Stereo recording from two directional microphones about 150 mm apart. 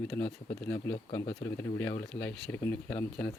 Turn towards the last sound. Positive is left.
turn(degrees=10)  # may be behind; listen again after turning